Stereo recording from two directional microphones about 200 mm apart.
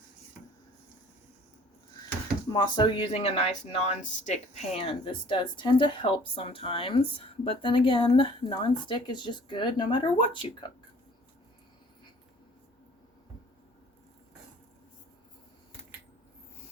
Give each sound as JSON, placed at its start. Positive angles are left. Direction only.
{"t": 2.5, "sound": "speech", "side_deg": 25}